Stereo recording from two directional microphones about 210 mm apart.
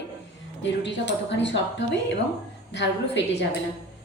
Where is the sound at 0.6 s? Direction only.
55° left (ahead or behind).